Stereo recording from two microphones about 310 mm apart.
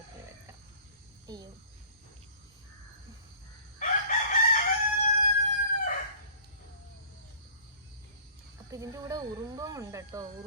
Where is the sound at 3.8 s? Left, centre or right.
Left.